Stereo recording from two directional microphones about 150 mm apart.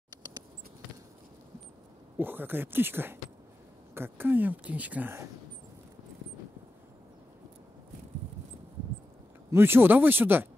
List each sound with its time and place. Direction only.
0.1 s patter: 25° right (ahead or behind)
2.1 s speech: 15° right (ahead or behind)
9.5 s speech: 15° right (ahead or behind)